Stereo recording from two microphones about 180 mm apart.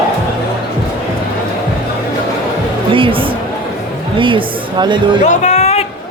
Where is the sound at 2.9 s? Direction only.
30° right (ahead or behind).